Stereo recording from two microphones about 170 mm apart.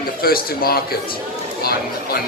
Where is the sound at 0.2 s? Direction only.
60° left (ahead or behind).